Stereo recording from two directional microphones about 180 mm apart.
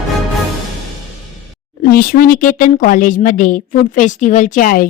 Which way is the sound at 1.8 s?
55° left (ahead or behind).